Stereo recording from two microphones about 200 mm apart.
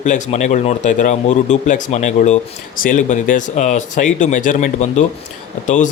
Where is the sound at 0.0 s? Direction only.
35° left (ahead or behind).